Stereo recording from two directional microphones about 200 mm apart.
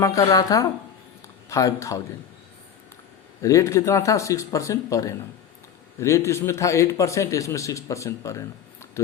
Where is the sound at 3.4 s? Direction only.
15° left (ahead or behind).